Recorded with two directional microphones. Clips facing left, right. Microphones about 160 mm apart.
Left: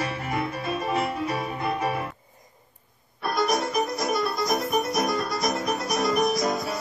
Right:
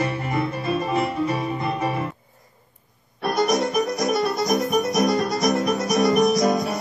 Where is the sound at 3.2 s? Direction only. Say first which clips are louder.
Right 4 dB; 20° right (ahead or behind).